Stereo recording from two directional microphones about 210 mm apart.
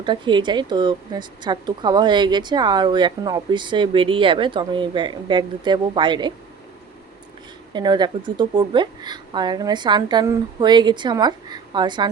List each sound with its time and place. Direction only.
0.0 s a woman's voice: 20° right (ahead or behind)
7.7 s a woman's voice: 20° right (ahead or behind)